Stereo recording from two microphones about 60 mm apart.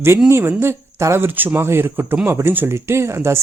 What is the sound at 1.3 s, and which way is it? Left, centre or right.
A man's voice, right.